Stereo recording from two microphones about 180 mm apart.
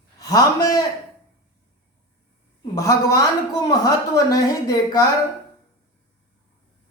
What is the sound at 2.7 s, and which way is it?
Speech, 20° left (ahead or behind).